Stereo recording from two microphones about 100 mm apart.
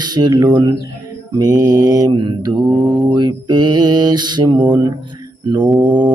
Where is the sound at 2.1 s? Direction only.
55° right (ahead or behind).